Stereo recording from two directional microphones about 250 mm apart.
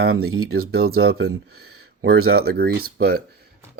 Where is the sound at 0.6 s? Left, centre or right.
Right.